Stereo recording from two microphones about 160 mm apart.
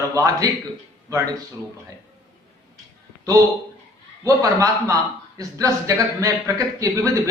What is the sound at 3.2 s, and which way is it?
A man's voice, 20° right (ahead or behind).